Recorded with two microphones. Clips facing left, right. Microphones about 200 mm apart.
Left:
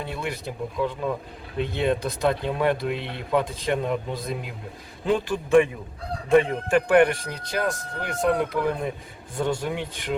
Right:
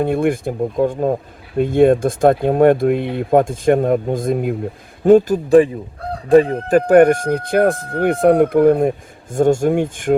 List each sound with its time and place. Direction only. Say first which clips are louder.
0.0 s a man's voice: right 14 dB; 50° right (ahead or behind)